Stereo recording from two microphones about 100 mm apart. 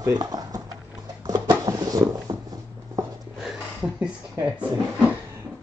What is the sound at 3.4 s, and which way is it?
Speech, 5° right (ahead or behind).